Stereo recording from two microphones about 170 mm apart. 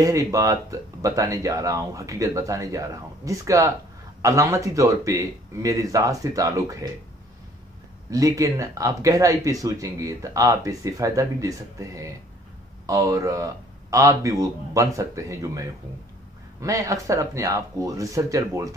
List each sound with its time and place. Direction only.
0.0 s speech: 20° right (ahead or behind)
8.1 s speech: 20° right (ahead or behind)